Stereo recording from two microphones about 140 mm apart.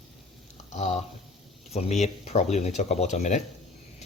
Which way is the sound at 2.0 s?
55° left (ahead or behind).